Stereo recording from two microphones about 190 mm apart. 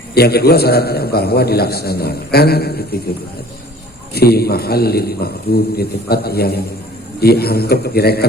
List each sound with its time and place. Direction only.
0.1 s a man's voice: 55° left (ahead or behind)
4.1 s a man's voice: 55° left (ahead or behind)